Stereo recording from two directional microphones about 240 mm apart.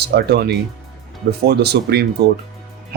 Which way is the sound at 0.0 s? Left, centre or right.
Right.